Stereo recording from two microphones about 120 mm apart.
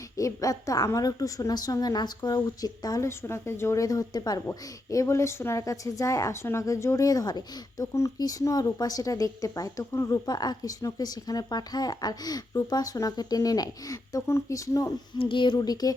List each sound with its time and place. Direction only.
0.2 s a woman's voice: 25° left (ahead or behind)
15.2 s speech: 45° left (ahead or behind)